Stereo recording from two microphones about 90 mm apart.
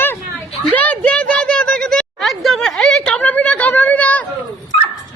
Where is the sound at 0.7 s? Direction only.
15° left (ahead or behind).